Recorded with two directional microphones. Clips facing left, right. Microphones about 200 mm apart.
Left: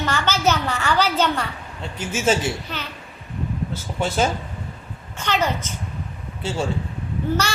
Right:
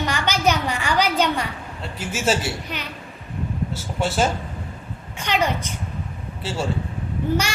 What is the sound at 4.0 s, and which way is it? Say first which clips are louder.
A child's voice: even; 5° right (ahead or behind).